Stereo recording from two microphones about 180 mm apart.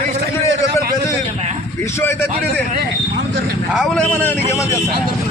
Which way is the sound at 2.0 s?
15° left (ahead or behind).